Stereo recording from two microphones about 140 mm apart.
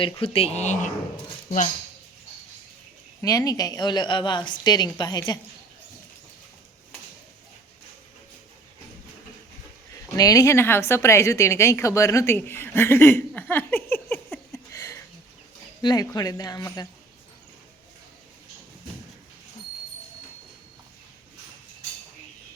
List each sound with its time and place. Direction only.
0.0 s speech: 45° left (ahead or behind)
3.2 s a woman's voice: 25° left (ahead or behind)
10.2 s a woman's voice: 25° left (ahead or behind)